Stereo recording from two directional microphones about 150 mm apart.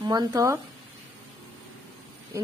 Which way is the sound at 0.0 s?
25° right (ahead or behind).